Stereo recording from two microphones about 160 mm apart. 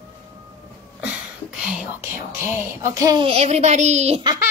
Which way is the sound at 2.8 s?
20° right (ahead or behind).